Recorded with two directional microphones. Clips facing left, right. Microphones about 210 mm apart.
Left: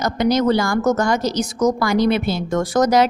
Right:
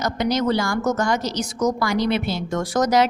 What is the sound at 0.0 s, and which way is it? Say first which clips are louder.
A woman's voice: left 4 dB; 50° left (ahead or behind).